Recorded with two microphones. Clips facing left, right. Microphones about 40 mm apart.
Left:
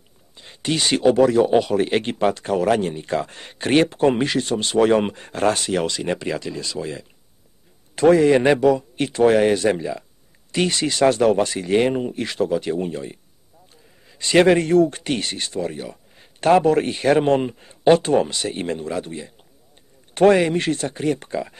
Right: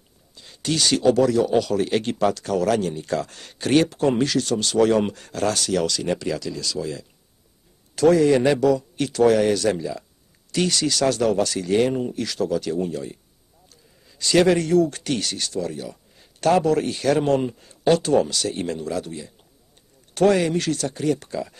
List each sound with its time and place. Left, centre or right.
0.3 s speech: left